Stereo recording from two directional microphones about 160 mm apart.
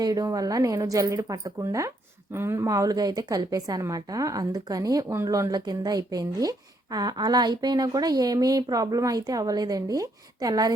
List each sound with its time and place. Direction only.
0.0 s a woman's voice: 20° right (ahead or behind)